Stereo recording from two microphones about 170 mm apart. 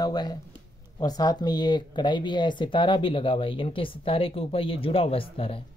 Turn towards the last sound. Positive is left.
turn(degrees=35)  # may be behind; listen again after turning